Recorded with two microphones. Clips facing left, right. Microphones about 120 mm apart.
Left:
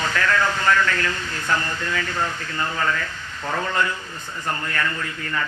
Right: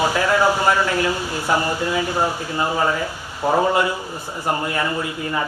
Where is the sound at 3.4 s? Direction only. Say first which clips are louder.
Right 9 dB; 35° right (ahead or behind).